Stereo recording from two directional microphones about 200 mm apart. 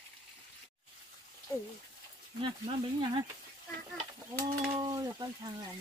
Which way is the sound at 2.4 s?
25° right (ahead or behind).